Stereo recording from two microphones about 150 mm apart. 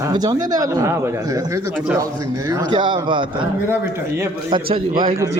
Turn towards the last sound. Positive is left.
turn(degrees=-35)  # may be behind; listen again after turning